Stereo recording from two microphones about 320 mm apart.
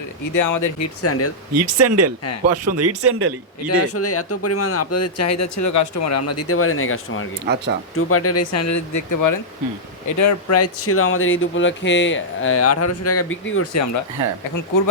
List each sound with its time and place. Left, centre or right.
0.3 s speech: left
1.0 s speech: left
1.5 s speech: right
3.7 s speech: left
7.4 s speech: right
7.9 s speech: left
10.2 s speech: left